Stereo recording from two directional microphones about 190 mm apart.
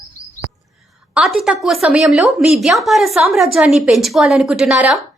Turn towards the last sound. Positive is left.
turn(degrees=0)  # may be behind; listen again after turning